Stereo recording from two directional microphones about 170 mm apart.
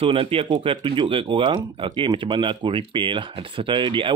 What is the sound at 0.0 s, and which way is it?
Speech, 35° right (ahead or behind).